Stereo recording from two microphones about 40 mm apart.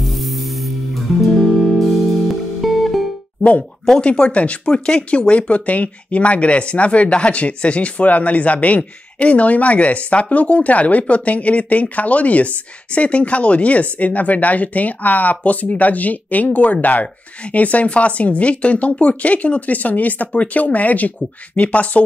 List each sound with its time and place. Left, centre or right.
0.0 s music: centre
4.0 s speech: left
4.7 s speech: left